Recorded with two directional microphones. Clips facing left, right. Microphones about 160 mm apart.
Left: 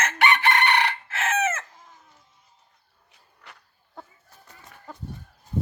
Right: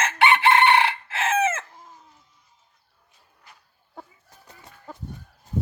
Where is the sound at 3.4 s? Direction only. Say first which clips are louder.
Left 4 dB; 75° left (ahead or behind).